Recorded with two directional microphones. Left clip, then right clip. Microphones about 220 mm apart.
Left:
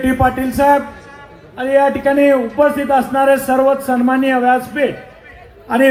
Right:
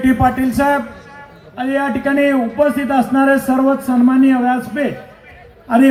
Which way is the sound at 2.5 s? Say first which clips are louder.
Left 2 dB; 35° left (ahead or behind).